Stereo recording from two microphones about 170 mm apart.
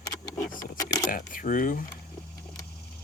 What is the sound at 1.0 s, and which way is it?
Speech, 55° left (ahead or behind).